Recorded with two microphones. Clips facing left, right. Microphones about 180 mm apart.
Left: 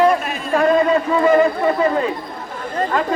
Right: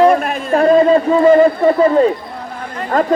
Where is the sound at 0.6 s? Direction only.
35° right (ahead or behind).